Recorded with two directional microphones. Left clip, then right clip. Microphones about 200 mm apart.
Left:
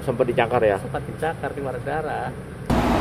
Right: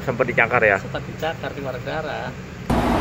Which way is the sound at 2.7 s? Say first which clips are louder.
Right 1 dB; centre (ahead or behind).